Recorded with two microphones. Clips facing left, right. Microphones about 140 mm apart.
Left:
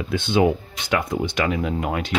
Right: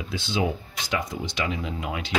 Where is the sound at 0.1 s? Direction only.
55° left (ahead or behind).